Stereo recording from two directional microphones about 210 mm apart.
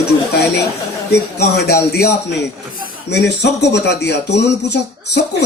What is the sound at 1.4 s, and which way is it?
Speech, 50° left (ahead or behind).